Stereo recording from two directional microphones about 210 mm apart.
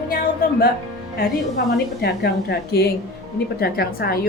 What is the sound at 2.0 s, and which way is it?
A woman's voice, 50° left (ahead or behind).